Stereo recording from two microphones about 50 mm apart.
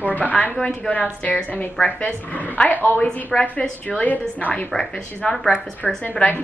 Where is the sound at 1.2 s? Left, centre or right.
Left.